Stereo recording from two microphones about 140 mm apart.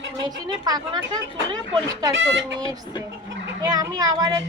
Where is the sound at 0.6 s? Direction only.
30° right (ahead or behind).